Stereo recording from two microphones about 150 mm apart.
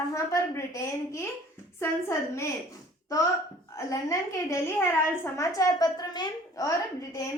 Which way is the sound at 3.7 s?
20° left (ahead or behind).